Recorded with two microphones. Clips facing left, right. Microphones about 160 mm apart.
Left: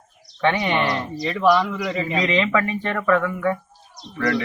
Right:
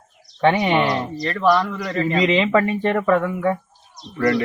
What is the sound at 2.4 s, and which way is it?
Speech, 35° right (ahead or behind).